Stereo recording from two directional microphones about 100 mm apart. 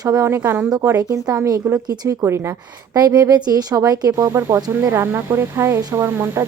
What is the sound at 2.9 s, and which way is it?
Speech, 40° right (ahead or behind).